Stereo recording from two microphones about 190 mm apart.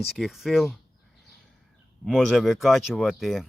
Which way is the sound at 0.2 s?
Centre (ahead or behind).